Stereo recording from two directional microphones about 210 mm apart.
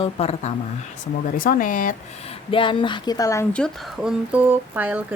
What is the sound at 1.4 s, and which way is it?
Speech, 40° left (ahead or behind).